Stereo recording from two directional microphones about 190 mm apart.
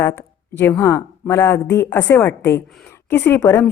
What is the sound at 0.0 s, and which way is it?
A woman's voice, 10° left (ahead or behind).